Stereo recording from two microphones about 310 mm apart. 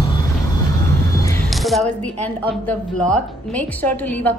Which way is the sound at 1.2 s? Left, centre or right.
Centre.